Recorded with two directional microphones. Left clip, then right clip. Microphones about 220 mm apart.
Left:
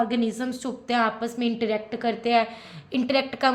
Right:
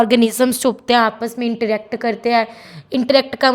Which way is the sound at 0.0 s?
55° right (ahead or behind).